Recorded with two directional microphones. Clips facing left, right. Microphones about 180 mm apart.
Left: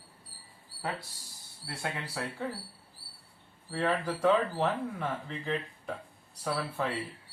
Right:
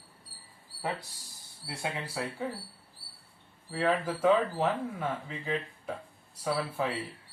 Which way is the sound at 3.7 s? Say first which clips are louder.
Right 1 dB; 5° right (ahead or behind).